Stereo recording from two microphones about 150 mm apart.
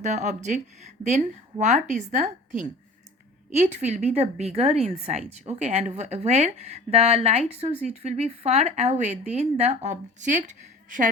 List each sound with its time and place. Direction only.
0.0 s a woman's voice: 50° right (ahead or behind)